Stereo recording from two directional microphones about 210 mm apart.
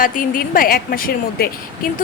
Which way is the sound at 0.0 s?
40° left (ahead or behind).